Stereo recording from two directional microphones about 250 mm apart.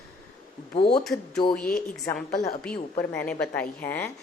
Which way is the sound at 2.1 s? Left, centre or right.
Left.